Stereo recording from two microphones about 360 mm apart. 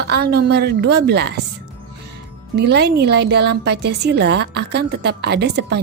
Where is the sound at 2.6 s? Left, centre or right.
Right.